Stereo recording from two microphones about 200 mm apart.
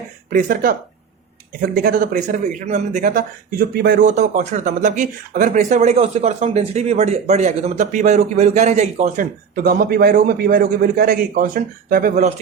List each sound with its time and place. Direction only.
0.3 s speech: 45° right (ahead or behind)